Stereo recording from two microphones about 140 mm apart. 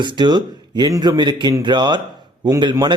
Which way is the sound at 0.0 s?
35° right (ahead or behind).